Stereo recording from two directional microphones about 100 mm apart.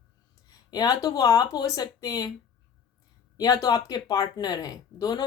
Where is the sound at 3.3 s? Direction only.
35° left (ahead or behind).